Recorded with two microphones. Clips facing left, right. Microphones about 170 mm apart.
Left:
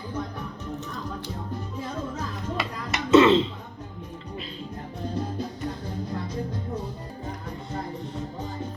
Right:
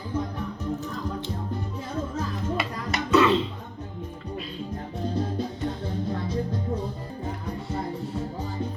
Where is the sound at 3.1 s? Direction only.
25° left (ahead or behind).